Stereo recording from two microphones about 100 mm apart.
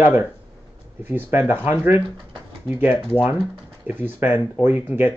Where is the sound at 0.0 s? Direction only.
20° right (ahead or behind).